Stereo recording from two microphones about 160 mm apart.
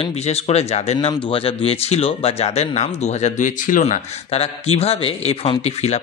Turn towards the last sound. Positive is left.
turn(degrees=40)  # may be behind; listen again after turning